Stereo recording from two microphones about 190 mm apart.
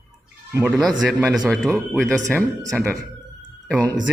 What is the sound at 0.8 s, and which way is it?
Speech, centre (ahead or behind).